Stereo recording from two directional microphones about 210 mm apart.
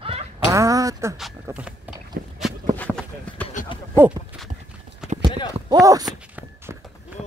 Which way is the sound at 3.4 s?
25° left (ahead or behind).